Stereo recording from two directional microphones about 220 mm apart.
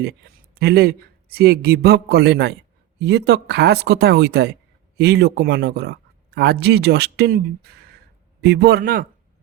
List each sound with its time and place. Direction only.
0.0 s speech: 45° right (ahead or behind)